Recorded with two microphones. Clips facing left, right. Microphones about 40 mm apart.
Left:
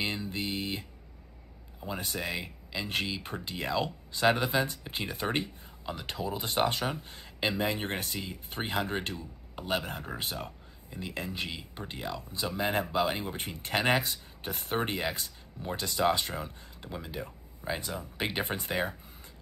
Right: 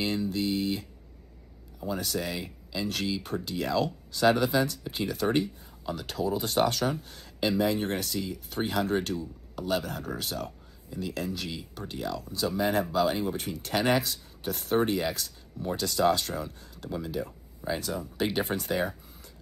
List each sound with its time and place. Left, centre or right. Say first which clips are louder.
0.0 s a sound: right 5 dB; left
1.8 s speech: right 4 dB; left
14.6 s speech: right 6 dB; centre
14.9 s speech: right 4 dB; left